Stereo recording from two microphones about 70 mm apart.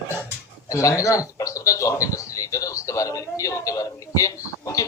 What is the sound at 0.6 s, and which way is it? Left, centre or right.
A man's voice, left.